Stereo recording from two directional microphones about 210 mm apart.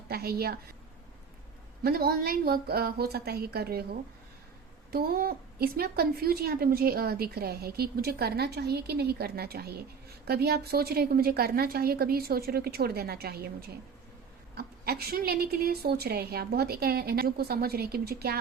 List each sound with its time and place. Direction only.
0.1 s a woman's voice: 45° right (ahead or behind)
1.8 s a woman's voice: 45° right (ahead or behind)
4.9 s a woman's voice: 45° right (ahead or behind)